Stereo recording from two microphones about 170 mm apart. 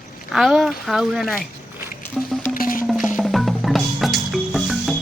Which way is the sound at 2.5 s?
55° left (ahead or behind).